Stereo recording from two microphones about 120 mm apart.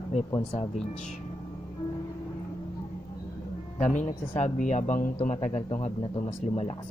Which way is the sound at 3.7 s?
75° left (ahead or behind).